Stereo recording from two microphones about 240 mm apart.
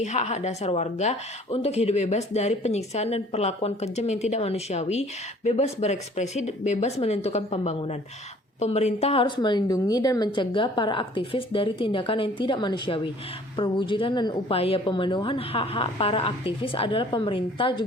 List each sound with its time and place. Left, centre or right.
0.0 s speech: left